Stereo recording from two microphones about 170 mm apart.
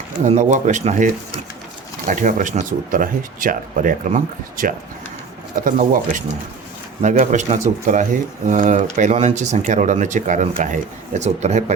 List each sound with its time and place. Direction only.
0.3 s speech: 45° right (ahead or behind)